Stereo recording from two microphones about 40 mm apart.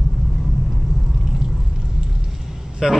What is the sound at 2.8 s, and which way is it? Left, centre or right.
Speech, centre.